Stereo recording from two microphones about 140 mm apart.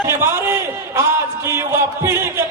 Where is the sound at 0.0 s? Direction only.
20° right (ahead or behind).